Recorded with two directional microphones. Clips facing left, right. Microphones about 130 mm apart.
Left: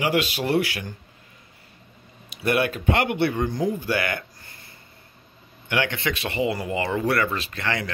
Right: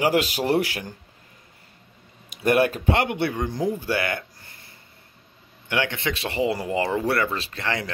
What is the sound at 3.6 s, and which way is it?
Speech, 30° right (ahead or behind).